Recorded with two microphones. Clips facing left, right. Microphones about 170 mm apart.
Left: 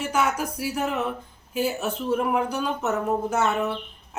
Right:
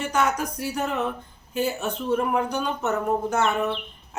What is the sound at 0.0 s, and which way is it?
Speech, 5° left (ahead or behind).